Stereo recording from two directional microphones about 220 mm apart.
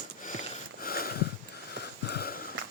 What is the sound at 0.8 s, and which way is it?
Sniff, 40° left (ahead or behind).